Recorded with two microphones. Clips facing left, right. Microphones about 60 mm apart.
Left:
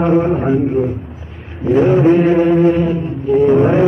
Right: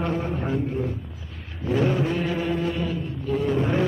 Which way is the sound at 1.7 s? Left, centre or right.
Left.